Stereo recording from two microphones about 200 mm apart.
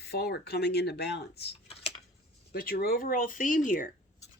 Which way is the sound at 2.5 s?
50° left (ahead or behind).